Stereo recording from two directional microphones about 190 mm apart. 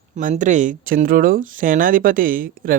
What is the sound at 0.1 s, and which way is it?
Speech, 45° right (ahead or behind).